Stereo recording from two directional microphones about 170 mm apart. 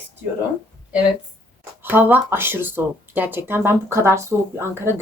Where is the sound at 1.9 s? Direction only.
10° right (ahead or behind).